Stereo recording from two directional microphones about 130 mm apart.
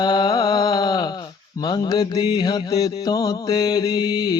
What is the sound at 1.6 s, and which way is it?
Mantra, 35° left (ahead or behind).